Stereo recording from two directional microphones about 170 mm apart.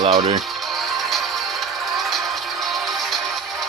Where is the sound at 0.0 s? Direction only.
20° right (ahead or behind).